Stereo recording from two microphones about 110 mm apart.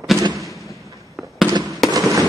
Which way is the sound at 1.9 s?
30° right (ahead or behind).